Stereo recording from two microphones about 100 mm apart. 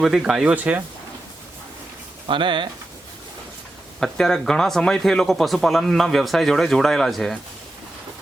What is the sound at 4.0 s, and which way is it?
Speech, 5° left (ahead or behind).